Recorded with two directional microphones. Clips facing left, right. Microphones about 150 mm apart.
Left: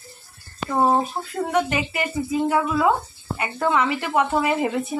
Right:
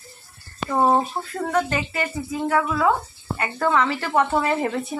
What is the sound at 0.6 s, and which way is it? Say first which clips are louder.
A woman's voice: even; 5° left (ahead or behind).